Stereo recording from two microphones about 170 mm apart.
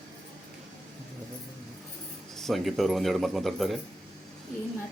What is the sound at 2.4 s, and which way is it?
Speech, centre (ahead or behind).